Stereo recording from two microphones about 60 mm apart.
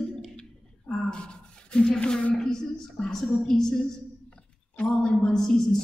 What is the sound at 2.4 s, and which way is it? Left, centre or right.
A woman's voice, centre.